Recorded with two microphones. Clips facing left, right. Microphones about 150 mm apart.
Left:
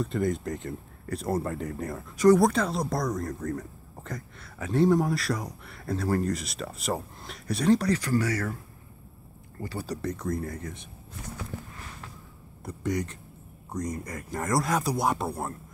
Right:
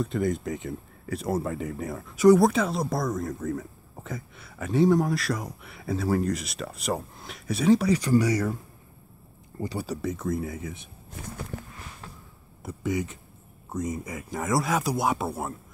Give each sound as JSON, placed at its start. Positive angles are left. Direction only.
{"t": 0.0, "sound": "speech", "side_deg": 0}
{"t": 8.0, "sound": "speech", "side_deg": -15}
{"t": 9.6, "sound": "speech", "side_deg": -20}
{"t": 9.8, "sound": "speech", "side_deg": -5}
{"t": 12.6, "sound": "speech", "side_deg": -5}